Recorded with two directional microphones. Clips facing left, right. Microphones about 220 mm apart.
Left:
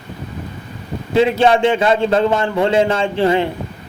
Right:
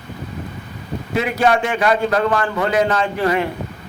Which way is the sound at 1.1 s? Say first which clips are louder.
Left 5 dB; 30° left (ahead or behind).